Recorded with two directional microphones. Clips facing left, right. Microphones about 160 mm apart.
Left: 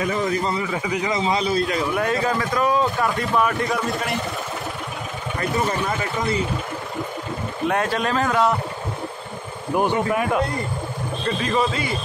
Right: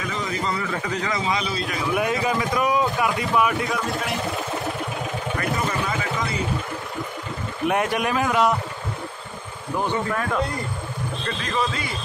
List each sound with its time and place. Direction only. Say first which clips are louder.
0.0 s a man's voice: left 6 dB; 45° left (ahead or behind)
0.6 s speech: left 2 dB; 10° left (ahead or behind)
1.1 s a man's voice: left 7 dB; 30° left (ahead or behind)
2.0 s a man's voice: right 2 dB; 15° right (ahead or behind)
7.6 s a man's voice: even; 20° right (ahead or behind)
9.8 s speech: left 4 dB; 15° left (ahead or behind)